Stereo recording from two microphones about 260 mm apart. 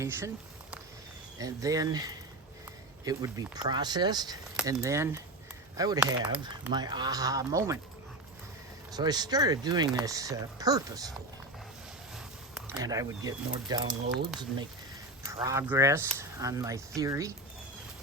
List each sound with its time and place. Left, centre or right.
0.0 s speech: centre
1.4 s speech: centre
8.9 s speech: centre
12.1 s a sound: centre
12.7 s speech: centre
15.3 s speech: centre